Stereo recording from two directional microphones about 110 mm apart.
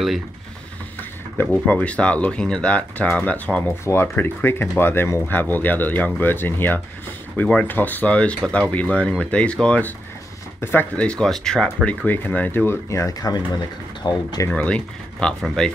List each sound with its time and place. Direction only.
1.7 s speech: 10° left (ahead or behind); by 14.5 s 35° left (ahead or behind)
14.5 s speech: 10° left (ahead or behind)